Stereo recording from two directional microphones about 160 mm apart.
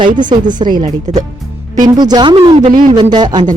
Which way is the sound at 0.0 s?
30° right (ahead or behind).